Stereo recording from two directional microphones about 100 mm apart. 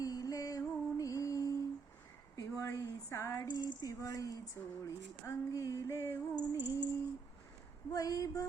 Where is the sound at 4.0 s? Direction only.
35° left (ahead or behind).